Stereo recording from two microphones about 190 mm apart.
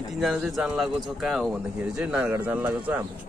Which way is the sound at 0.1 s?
Centre (ahead or behind).